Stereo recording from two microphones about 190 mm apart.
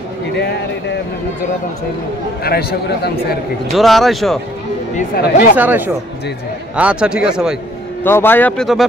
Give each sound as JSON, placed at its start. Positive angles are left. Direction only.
{"t": 0.4, "sound": "a man's voice", "side_deg": 60}
{"t": 2.4, "sound": "a man's voice", "side_deg": 55}
{"t": 3.7, "sound": "a man's voice", "side_deg": 0}
{"t": 4.9, "sound": "a man's voice", "side_deg": 55}
{"t": 5.6, "sound": "a man's voice", "side_deg": -10}
{"t": 8.0, "sound": "speech", "side_deg": 10}